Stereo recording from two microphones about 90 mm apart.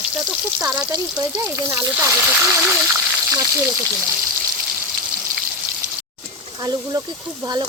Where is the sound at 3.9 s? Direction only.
10° right (ahead or behind).